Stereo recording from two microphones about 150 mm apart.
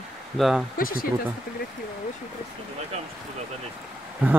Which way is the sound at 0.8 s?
70° left (ahead or behind).